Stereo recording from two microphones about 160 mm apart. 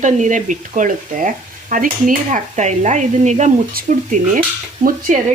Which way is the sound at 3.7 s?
60° right (ahead or behind).